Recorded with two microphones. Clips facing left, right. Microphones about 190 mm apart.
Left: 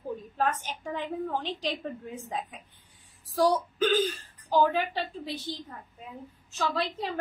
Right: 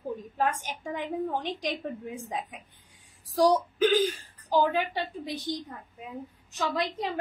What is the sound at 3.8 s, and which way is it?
Speech, 10° right (ahead or behind).